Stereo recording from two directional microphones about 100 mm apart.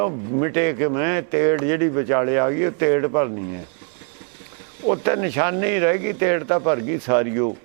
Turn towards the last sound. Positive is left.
turn(degrees=-15)  # may be behind; listen again after turning